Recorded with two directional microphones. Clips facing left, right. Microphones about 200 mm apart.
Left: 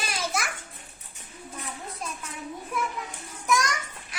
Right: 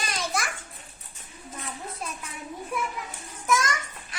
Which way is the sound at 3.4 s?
Centre (ahead or behind).